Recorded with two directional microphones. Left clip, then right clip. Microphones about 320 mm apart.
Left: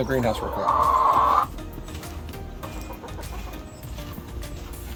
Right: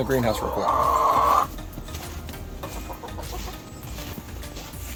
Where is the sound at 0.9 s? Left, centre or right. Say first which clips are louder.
Left 1 dB; right.